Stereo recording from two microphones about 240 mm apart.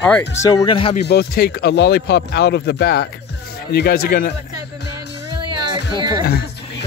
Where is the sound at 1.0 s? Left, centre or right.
Left.